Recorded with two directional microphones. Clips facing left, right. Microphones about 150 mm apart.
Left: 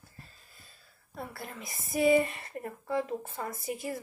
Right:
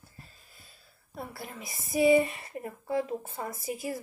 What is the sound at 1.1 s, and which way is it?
Speech, 5° right (ahead or behind).